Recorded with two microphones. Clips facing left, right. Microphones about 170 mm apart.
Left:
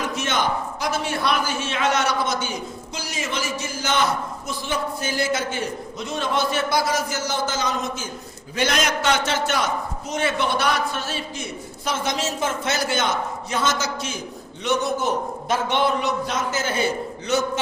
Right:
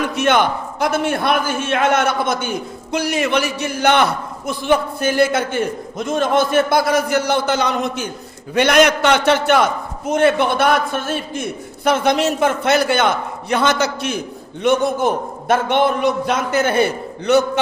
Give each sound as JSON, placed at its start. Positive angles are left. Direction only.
{"t": 0.0, "sound": "a man's voice", "side_deg": -60}